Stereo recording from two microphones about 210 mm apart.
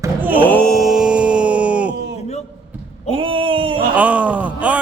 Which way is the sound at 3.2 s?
25° right (ahead or behind).